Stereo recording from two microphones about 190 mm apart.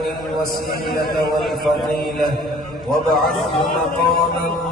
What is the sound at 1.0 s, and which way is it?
Speech, 55° left (ahead or behind).